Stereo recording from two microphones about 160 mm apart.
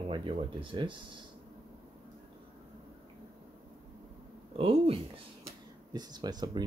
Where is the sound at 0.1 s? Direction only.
30° right (ahead or behind).